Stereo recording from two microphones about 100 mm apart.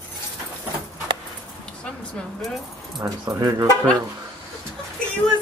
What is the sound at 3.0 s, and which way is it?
Speech, 40° right (ahead or behind).